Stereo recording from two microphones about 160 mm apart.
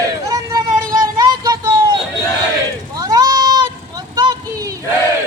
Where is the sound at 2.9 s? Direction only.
25° right (ahead or behind).